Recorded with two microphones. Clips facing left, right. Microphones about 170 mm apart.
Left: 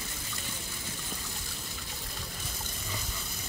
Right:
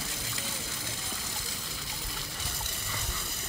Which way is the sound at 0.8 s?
90° right.